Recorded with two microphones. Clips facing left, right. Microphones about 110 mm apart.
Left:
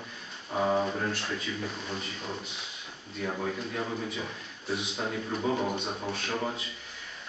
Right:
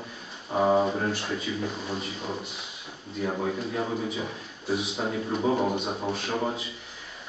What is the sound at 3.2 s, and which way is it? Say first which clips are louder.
A man's voice: right 4 dB; 15° right (ahead or behind).